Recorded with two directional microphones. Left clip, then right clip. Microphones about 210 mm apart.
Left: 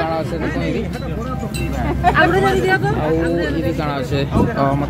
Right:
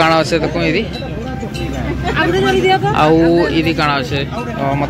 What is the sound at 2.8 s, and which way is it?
Speech, 25° right (ahead or behind).